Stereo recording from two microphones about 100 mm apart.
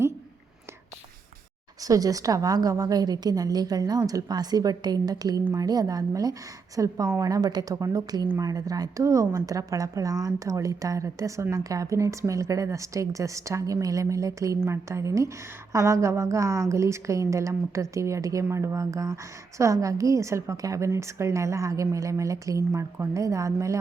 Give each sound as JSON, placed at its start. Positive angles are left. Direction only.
{"t": 1.8, "sound": "a woman's voice", "side_deg": -35}